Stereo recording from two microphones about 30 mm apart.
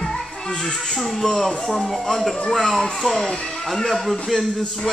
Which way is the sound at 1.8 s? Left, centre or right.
Centre.